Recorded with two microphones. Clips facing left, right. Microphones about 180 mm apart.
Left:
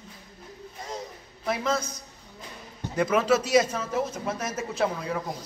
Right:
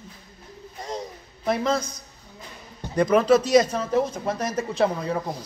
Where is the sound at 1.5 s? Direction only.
5° left (ahead or behind).